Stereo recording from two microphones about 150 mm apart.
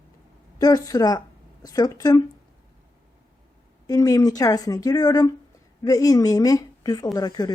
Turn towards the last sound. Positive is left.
turn(degrees=25)  # may be behind; listen again after turning